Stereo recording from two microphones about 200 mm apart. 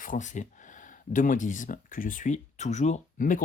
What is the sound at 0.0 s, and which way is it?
Speech, 40° left (ahead or behind).